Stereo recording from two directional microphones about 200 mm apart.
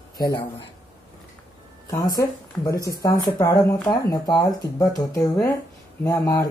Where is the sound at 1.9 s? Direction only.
15° left (ahead or behind).